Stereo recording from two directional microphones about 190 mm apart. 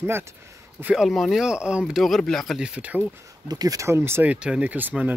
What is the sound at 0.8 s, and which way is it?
A man's voice, centre (ahead or behind).